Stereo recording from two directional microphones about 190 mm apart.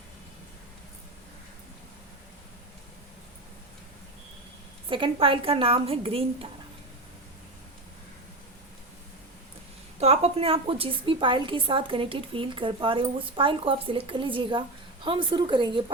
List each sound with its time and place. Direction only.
4.9 s a woman's voice: 25° right (ahead or behind)
10.0 s a woman's voice: 30° right (ahead or behind)